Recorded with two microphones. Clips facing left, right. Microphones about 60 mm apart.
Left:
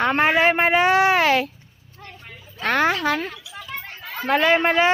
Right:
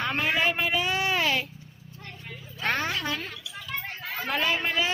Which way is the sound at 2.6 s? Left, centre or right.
Left.